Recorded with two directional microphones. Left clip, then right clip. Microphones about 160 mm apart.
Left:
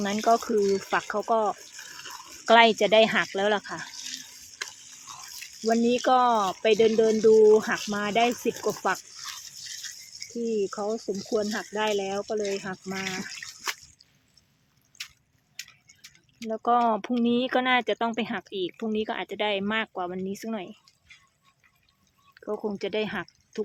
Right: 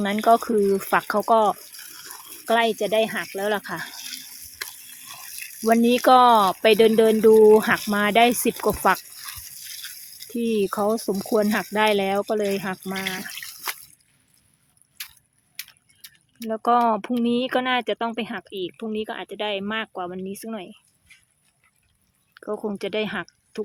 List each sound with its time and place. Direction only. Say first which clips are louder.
0.0 s speech: right 5 dB; 20° right (ahead or behind)
1.7 s water: even; 15° right (ahead or behind)
2.5 s speech: left 3 dB; centre (ahead or behind)
3.6 s water: right 4 dB; 20° right (ahead or behind)
7.9 s speech: right 7 dB; 35° right (ahead or behind)
8.9 s a sound: right 7 dB; 30° right (ahead or behind)
9.6 s a sound: right 2 dB; 20° right (ahead or behind)
10.3 s speech: right 5 dB; 45° right (ahead or behind)
16.0 s speech: right 4 dB; 30° right (ahead or behind); by 20.7 s 5° right (ahead or behind)
22.4 s speech: right 2 dB; 20° right (ahead or behind)